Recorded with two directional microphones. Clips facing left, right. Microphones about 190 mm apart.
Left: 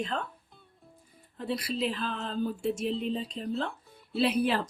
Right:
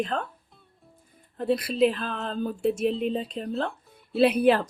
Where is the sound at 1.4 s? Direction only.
55° right (ahead or behind).